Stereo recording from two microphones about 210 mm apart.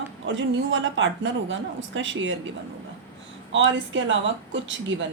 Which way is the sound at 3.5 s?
60° right (ahead or behind).